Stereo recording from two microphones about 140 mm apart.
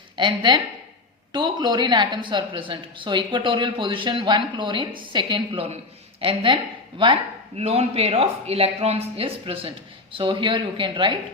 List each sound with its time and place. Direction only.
0.2 s a woman's voice: 35° right (ahead or behind)